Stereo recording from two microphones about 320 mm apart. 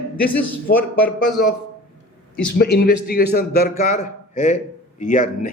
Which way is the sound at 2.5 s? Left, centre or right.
Left.